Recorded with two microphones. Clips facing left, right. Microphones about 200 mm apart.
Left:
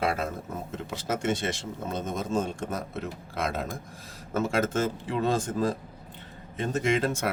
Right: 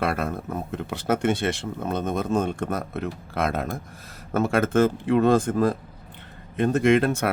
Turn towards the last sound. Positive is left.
turn(degrees=-60)  # may be behind; listen again after turning